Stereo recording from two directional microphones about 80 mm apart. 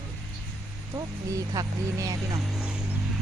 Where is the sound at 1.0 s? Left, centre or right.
Right.